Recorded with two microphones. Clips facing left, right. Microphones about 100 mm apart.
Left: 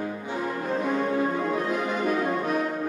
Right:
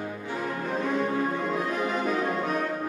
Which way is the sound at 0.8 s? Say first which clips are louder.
Left 1 dB; 10° left (ahead or behind).